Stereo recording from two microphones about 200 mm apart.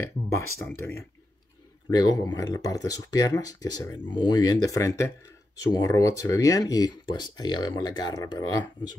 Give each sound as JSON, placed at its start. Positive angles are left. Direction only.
{"t": 0.6, "sound": "speech", "side_deg": 10}